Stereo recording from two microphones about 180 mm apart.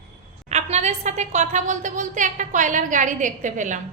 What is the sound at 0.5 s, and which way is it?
A woman's voice, 40° right (ahead or behind).